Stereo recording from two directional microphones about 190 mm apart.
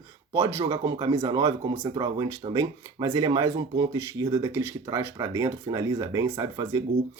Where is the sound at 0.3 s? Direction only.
15° right (ahead or behind).